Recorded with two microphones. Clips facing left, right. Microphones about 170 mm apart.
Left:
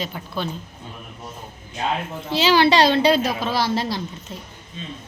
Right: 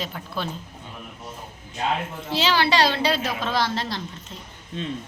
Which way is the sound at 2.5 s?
20° left (ahead or behind).